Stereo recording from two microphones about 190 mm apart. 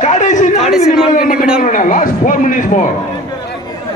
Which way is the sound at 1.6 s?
45° left (ahead or behind).